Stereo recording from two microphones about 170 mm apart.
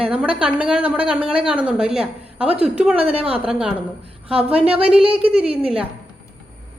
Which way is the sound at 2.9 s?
35° right (ahead or behind).